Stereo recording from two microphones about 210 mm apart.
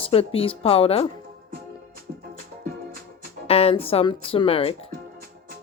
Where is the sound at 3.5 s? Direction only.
30° left (ahead or behind).